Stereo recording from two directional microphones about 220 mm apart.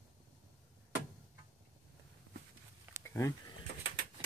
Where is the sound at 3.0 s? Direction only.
10° left (ahead or behind).